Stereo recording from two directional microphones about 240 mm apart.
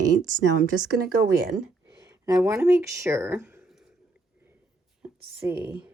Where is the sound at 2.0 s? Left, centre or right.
Centre.